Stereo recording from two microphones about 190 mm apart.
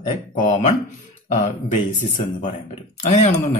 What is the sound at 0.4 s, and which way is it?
A man's voice, 40° left (ahead or behind).